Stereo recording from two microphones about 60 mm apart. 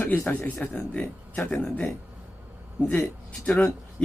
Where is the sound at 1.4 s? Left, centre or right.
Centre.